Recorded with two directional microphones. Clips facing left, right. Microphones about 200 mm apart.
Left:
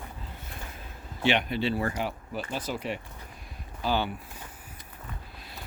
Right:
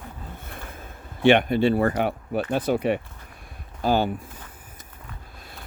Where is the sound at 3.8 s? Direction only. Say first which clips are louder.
Right 6 dB; 45° right (ahead or behind).